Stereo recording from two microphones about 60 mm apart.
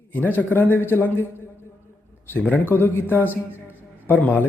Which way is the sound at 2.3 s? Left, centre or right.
Left.